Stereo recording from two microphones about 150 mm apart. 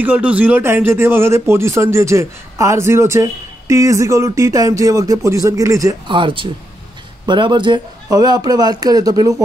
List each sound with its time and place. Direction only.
0.0 s a man's voice: 10° right (ahead or behind)